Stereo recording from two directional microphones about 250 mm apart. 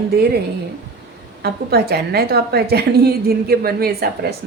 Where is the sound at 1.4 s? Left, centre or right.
Right.